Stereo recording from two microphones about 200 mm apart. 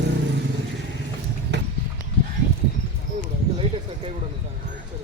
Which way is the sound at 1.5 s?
60° right (ahead or behind).